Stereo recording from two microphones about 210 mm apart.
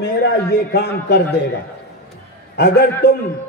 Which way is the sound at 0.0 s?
50° left (ahead or behind).